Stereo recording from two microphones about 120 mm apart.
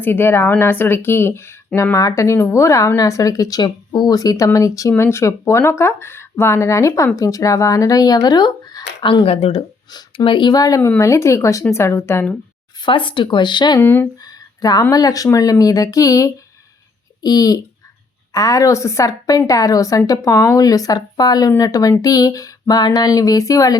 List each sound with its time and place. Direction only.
0.0 s speech: 15° left (ahead or behind); by 9.2 s 35° left (ahead or behind)
9.2 s speech: 55° left (ahead or behind)
10.2 s speech: 40° left (ahead or behind)
10.8 s speech: 20° left (ahead or behind)
12.8 s speech: 45° left (ahead or behind)
13.7 s speech: 20° left (ahead or behind)
14.3 s speech: 35° left (ahead or behind)